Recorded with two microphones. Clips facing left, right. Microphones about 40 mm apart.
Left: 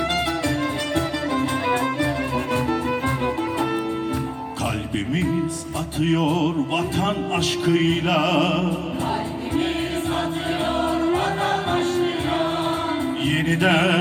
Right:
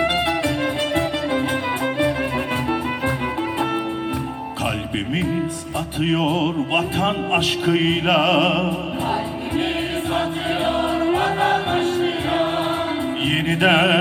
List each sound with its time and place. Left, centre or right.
6.0 s speech: right
10.7 s music: right
13.2 s speech: right